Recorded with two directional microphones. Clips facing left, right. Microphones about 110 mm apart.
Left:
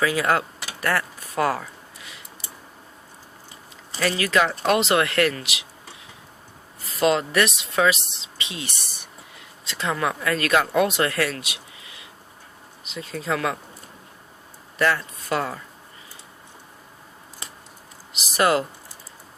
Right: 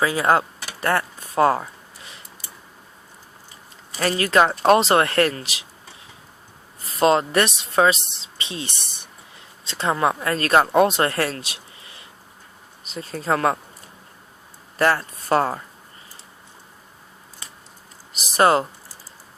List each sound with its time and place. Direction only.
0.0 s a sound: 30° right (ahead or behind)
4.0 s speech: 35° right (ahead or behind)
6.8 s speech: 35° right (ahead or behind)
14.8 s speech: 40° right (ahead or behind)
18.3 s speech: 35° right (ahead or behind)